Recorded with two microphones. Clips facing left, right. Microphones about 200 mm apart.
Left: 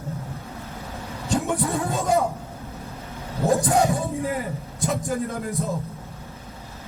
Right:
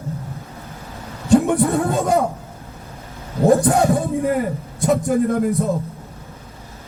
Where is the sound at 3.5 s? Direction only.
60° right (ahead or behind).